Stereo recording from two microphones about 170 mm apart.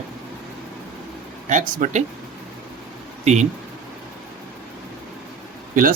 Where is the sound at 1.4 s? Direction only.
50° right (ahead or behind).